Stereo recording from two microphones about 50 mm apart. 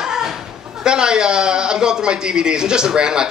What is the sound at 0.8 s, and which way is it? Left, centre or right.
A man's voice, centre.